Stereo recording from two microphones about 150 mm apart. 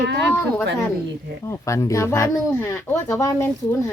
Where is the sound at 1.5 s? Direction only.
20° left (ahead or behind).